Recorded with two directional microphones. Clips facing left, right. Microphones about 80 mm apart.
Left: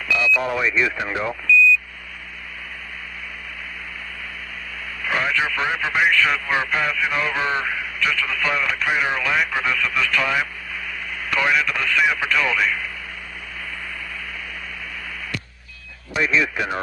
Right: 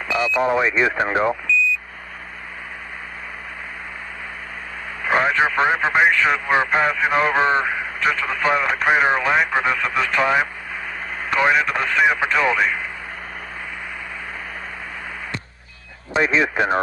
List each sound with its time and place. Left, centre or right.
0.1 s speech: right
5.0 s speech: right
16.1 s speech: right